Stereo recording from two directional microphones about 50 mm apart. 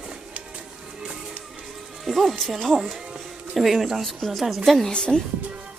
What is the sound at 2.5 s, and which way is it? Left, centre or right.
A woman's voice, centre.